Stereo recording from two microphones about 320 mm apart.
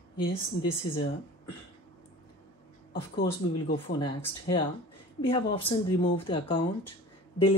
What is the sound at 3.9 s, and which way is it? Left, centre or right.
Speech, centre.